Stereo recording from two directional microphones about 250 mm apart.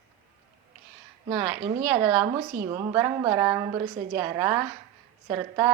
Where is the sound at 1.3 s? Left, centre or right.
Centre.